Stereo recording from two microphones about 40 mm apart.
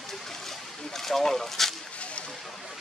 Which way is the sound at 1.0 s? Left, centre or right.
Centre.